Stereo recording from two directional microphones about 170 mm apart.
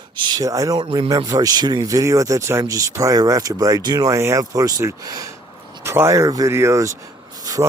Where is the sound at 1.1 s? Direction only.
20° right (ahead or behind).